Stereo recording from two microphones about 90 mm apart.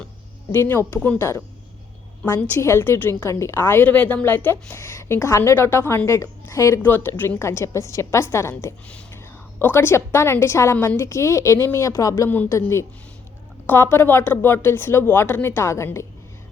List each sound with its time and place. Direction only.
0.5 s speech: 30° left (ahead or behind)
0.9 s speech: 10° left (ahead or behind)
2.6 s speech: 30° left (ahead or behind)
6.8 s a woman's voice: 25° left (ahead or behind)